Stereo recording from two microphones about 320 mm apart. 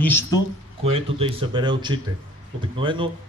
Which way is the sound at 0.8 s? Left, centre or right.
Centre.